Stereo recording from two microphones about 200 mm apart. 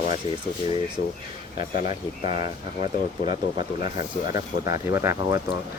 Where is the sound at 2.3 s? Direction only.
25° right (ahead or behind).